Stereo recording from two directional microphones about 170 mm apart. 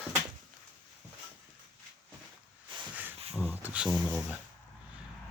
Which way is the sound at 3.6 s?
5° right (ahead or behind).